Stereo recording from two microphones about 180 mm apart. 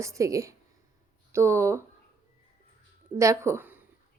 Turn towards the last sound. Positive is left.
turn(degrees=-10)  # may be behind; listen again after turning